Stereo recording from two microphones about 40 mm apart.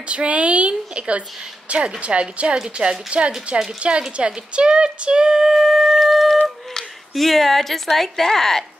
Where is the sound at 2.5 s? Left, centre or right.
Right.